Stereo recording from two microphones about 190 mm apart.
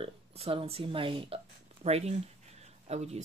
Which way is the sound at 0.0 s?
30° right (ahead or behind).